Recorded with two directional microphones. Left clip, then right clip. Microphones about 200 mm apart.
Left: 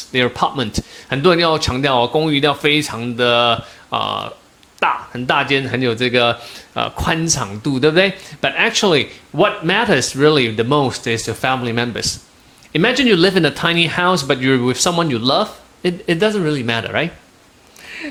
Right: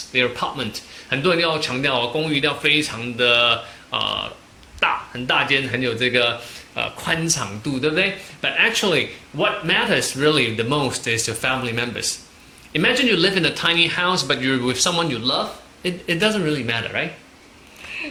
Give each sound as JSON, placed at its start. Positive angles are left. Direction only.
{"t": 0.1, "sound": "speech", "side_deg": 45}